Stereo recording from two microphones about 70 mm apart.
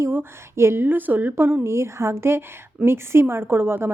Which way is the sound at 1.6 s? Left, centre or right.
Right.